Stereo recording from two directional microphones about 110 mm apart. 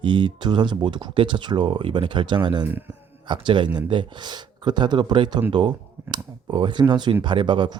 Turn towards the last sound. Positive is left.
turn(degrees=-45)  # may be behind; listen again after turning